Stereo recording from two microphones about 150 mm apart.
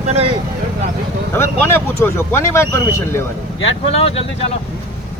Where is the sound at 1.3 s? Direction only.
15° left (ahead or behind).